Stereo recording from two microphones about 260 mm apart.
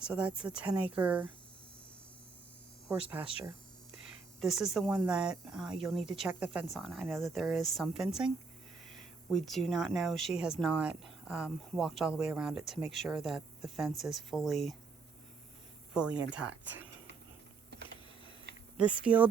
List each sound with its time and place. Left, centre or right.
0.1 s speech: centre
2.9 s speech: centre
9.3 s speech: centre
15.9 s speech: centre
17.7 s typing: right
18.5 s a sound: right
19.0 s speech: centre